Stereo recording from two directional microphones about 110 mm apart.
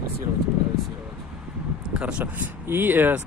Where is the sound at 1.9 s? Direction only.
10° right (ahead or behind).